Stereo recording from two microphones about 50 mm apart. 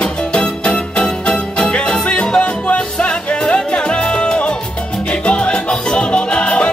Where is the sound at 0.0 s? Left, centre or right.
Left.